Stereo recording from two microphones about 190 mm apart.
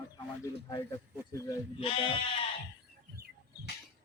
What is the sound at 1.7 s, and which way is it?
Speech, 30° left (ahead or behind).